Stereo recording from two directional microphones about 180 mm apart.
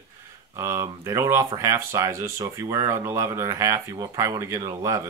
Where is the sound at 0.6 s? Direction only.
15° right (ahead or behind).